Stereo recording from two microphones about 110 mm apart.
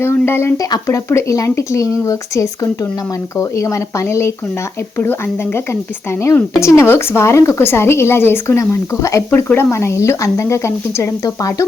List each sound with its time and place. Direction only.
0.0 s speech: 20° left (ahead or behind)
6.6 s speech: 25° left (ahead or behind)
9.5 s speech: 20° left (ahead or behind)